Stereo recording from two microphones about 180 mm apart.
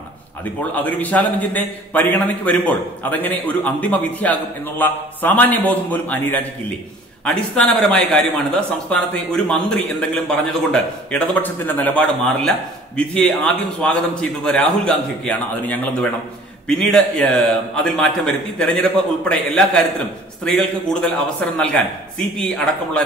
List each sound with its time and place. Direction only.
0.7 s a man's voice: 10° left (ahead or behind)